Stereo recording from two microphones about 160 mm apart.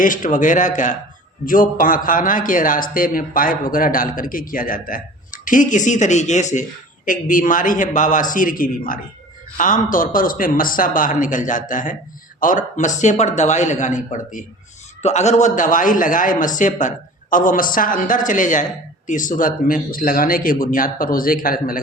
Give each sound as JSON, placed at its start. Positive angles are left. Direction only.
{"t": 0.0, "sound": "a man's voice", "side_deg": 55}